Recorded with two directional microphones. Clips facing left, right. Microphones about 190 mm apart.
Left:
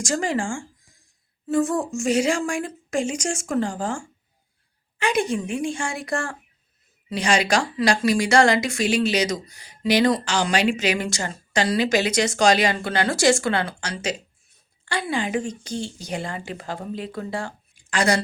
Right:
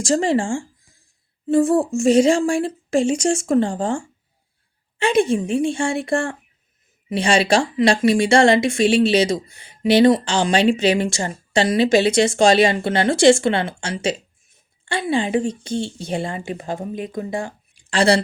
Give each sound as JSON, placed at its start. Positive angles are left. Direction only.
{"t": 0.0, "sound": "a woman's voice", "side_deg": -30}
{"t": 17.9, "sound": "a woman's voice", "side_deg": -30}